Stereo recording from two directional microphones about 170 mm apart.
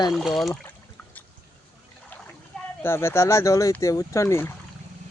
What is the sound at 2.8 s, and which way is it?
Speech, 15° left (ahead or behind).